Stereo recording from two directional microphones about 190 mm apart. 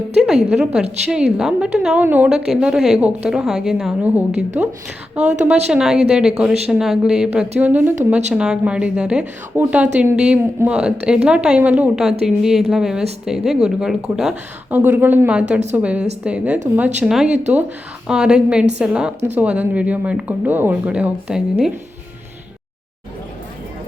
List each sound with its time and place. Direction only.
0.2 s a sound: 5° right (ahead or behind)
0.5 s a woman's voice: 5° right (ahead or behind)
5.7 s a woman's voice: 5° right (ahead or behind)
17.2 s speech: 35° right (ahead or behind)
18.1 s a woman's voice: 5° right (ahead or behind)